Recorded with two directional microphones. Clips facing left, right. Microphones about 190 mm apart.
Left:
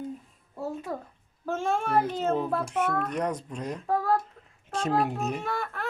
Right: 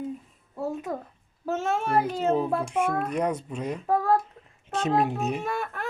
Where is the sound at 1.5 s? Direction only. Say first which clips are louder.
Right 1 dB; 5° right (ahead or behind).